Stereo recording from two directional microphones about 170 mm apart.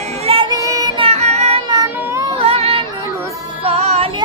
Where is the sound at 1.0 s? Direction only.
40° right (ahead or behind).